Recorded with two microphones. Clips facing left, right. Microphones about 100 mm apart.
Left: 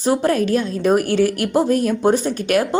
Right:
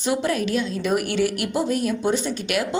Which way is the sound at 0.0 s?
40° left (ahead or behind).